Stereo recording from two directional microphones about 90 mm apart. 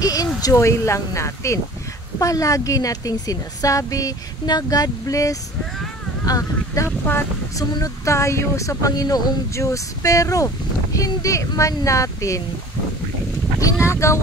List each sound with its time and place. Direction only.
0.0 s speech: 45° left (ahead or behind)
13.8 s speech: 30° left (ahead or behind)